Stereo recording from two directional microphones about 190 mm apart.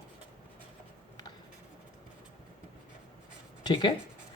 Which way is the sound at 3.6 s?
25° left (ahead or behind).